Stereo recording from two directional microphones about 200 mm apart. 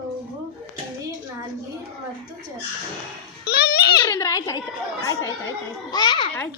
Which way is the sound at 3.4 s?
55° left (ahead or behind).